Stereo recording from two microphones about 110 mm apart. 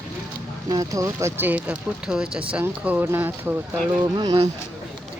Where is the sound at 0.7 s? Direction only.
35° right (ahead or behind).